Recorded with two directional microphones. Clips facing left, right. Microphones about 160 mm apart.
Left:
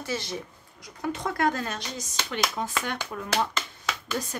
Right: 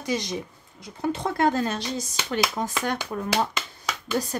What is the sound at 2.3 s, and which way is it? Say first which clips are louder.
Speech: right 3 dB; 40° right (ahead or behind).